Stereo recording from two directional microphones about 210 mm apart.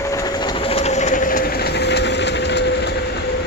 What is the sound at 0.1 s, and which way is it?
Train, 20° left (ahead or behind).